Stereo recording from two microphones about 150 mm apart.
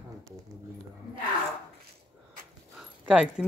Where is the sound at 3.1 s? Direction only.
5° right (ahead or behind).